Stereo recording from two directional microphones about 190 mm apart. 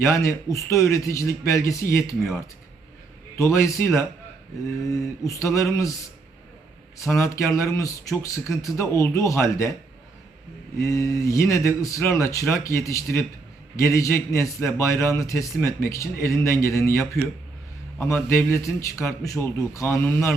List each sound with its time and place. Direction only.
0.0 s a man's voice: 15° left (ahead or behind)
3.3 s a man's voice: 15° left (ahead or behind)
7.2 s a man's voice: 15° left (ahead or behind)
10.8 s a man's voice: 15° left (ahead or behind)